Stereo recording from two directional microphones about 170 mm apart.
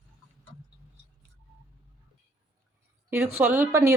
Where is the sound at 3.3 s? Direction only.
15° right (ahead or behind).